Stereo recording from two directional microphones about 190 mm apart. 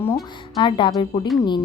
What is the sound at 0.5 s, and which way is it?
Speech, 25° left (ahead or behind).